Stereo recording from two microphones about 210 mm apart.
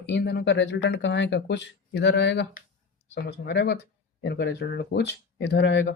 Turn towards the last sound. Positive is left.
turn(degrees=55)  # may be behind; listen again after turning